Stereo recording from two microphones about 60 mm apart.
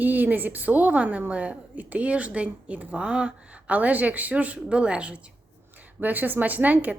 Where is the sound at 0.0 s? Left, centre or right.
Right.